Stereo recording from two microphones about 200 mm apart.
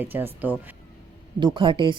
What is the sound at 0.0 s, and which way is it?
Speech, 10° right (ahead or behind).